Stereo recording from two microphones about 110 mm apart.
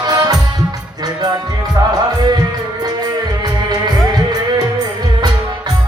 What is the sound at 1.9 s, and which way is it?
Music, 35° right (ahead or behind).